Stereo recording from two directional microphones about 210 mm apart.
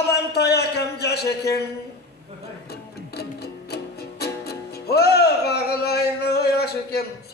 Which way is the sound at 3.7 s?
50° left (ahead or behind).